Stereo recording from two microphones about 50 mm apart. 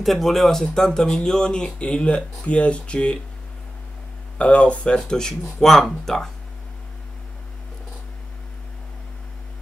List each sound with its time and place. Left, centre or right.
0.0 s speech: centre; by 3.2 s left
4.4 s speech: left; by 6.3 s centre